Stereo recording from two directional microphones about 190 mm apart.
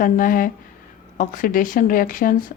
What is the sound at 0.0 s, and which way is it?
A woman's voice, 45° left (ahead or behind).